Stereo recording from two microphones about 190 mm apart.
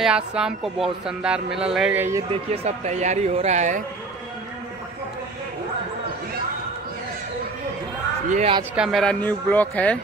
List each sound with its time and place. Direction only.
0.0 s speech: 5° right (ahead or behind)
2.3 s speech: 30° right (ahead or behind)
8.3 s speech: 35° right (ahead or behind)
8.7 s speech: centre (ahead or behind)